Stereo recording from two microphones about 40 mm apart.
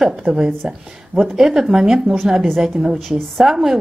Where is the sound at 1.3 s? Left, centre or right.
Centre.